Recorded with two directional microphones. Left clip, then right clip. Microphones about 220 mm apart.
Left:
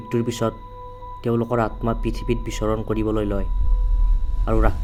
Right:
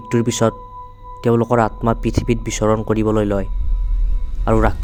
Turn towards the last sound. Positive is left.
turn(degrees=-45)  # may be behind; listen again after turning